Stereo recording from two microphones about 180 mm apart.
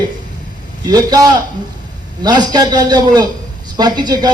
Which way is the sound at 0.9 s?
20° right (ahead or behind).